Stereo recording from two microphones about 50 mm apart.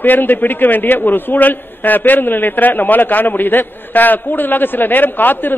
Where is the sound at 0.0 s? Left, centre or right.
Left.